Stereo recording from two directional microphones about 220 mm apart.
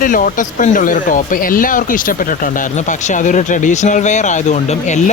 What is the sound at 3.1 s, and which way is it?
Speech, 35° left (ahead or behind).